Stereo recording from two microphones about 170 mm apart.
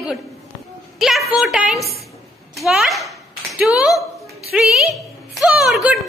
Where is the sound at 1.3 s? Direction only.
5° right (ahead or behind).